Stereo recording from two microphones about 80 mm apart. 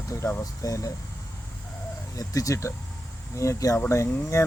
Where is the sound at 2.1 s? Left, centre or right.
Left.